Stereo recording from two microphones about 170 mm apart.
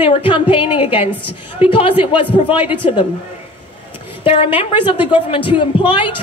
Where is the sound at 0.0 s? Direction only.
30° left (ahead or behind).